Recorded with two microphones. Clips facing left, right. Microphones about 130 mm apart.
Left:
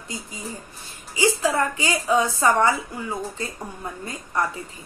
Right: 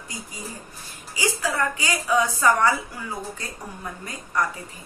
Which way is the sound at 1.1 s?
25° left (ahead or behind).